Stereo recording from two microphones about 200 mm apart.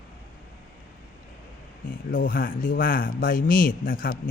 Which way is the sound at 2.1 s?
45° left (ahead or behind).